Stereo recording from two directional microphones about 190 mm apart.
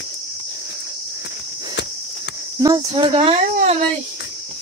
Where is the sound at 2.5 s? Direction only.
20° right (ahead or behind).